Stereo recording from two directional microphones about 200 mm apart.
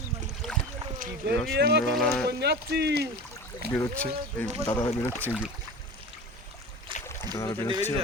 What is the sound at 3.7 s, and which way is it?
Speech, 10° left (ahead or behind).